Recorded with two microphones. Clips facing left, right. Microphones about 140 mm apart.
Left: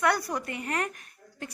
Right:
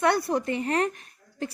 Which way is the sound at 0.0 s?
25° right (ahead or behind).